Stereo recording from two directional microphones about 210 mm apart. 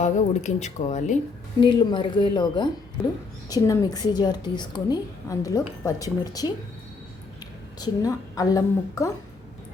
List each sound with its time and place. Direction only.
0.0 s speech: 35° left (ahead or behind)
1.6 s a woman's voice: 20° left (ahead or behind)
7.8 s a woman's voice: 15° left (ahead or behind)